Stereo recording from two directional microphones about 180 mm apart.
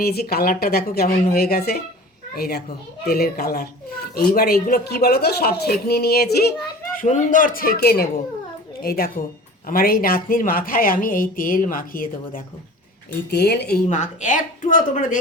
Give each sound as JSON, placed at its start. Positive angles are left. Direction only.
{"t": 0.0, "sound": "speech", "side_deg": 60}
{"t": 6.9, "sound": "a woman's voice", "side_deg": 45}
{"t": 13.3, "sound": "a woman's voice", "side_deg": 65}